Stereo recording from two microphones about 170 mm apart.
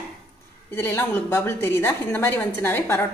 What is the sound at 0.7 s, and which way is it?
A woman's voice, 15° left (ahead or behind).